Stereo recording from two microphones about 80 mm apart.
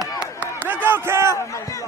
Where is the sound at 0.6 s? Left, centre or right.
Right.